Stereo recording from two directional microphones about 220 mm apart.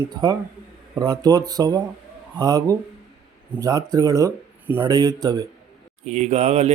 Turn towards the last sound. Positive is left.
turn(degrees=-30)  # may be behind; listen again after turning